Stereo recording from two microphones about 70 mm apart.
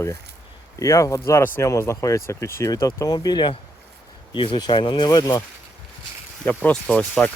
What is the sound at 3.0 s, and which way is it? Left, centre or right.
Speech, left.